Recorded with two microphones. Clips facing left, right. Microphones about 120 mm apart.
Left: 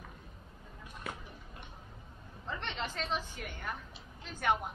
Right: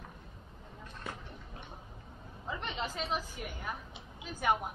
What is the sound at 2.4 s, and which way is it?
A woman's voice, 5° right (ahead or behind).